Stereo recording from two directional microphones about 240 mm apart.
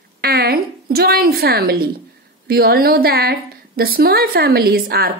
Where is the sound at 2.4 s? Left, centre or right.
Right.